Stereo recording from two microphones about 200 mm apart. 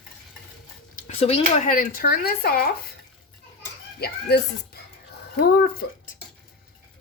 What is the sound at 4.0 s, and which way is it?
Speech, 55° left (ahead or behind).